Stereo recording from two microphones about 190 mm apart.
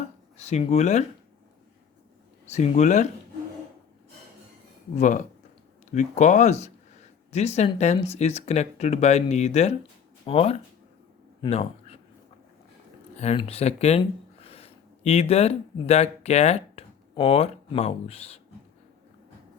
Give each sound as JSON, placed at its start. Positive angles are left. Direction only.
{"t": 0.3, "sound": "speech", "side_deg": 35}
{"t": 2.5, "sound": "speech", "side_deg": 35}
{"t": 4.9, "sound": "speech", "side_deg": 40}
{"t": 13.1, "sound": "speech", "side_deg": 35}